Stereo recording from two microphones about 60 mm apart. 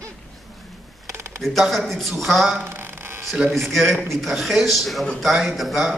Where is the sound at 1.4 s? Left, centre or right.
Centre.